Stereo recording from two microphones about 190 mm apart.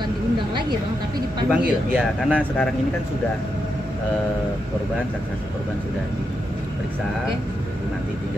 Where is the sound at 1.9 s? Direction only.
5° right (ahead or behind).